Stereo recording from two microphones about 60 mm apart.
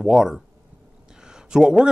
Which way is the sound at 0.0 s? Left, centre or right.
Centre.